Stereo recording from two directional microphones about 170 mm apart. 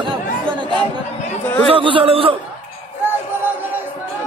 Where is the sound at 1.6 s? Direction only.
30° right (ahead or behind).